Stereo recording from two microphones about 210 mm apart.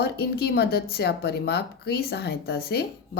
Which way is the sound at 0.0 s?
50° left (ahead or behind).